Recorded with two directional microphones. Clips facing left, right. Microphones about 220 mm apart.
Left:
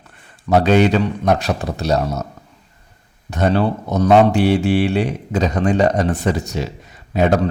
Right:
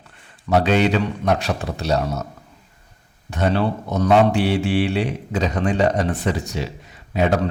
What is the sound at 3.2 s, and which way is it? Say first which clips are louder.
A man's voice: left 3 dB; 40° left (ahead or behind).